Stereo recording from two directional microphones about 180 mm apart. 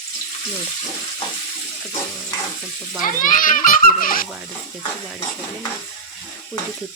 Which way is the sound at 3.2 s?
50° left (ahead or behind).